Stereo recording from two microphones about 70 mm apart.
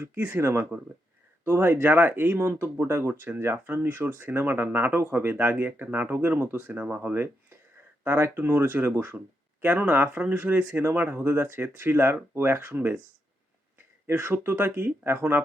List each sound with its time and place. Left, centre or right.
0.0 s speech: right
3.1 s speech: right
6.7 s speech: right
14.1 s speech: right